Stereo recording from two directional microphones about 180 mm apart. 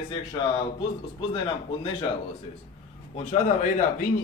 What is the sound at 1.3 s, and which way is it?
Speech, 25° left (ahead or behind).